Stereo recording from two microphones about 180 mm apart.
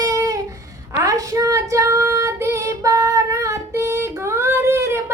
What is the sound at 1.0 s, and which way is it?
Child singing, 20° right (ahead or behind).